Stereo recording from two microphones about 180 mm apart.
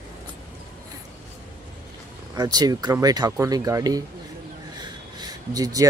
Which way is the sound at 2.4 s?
20° right (ahead or behind).